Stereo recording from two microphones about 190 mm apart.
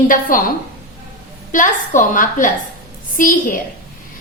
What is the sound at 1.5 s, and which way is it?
A woman's voice, 45° left (ahead or behind).